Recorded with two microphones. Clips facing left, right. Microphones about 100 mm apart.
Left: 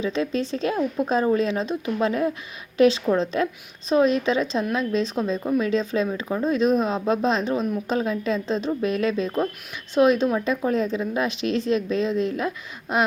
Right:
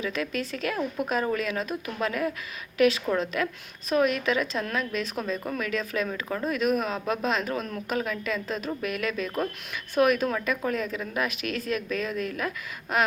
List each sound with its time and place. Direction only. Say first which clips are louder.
0.0 s speech: left 6 dB; 25° left (ahead or behind)